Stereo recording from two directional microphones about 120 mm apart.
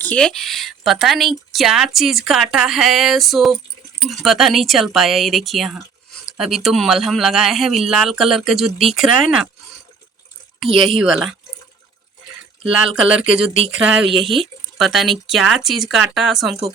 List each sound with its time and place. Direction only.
0.0 s speech: 10° left (ahead or behind)
10.6 s speech: centre (ahead or behind)
12.9 s speech: 5° right (ahead or behind)